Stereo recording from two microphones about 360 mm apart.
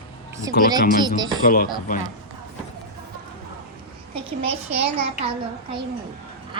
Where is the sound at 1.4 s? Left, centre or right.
Left.